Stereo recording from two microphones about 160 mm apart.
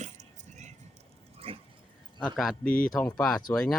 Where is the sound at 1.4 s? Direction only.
35° right (ahead or behind).